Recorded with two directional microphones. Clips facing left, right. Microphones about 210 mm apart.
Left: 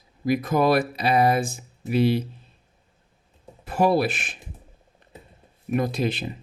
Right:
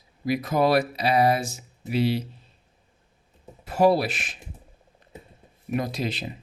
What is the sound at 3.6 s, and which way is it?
Speech, 50° left (ahead or behind).